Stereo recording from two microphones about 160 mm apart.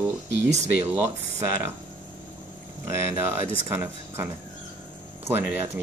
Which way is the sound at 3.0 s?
15° right (ahead or behind).